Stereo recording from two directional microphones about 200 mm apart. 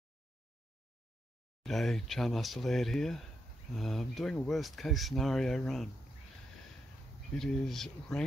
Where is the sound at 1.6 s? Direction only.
Centre (ahead or behind).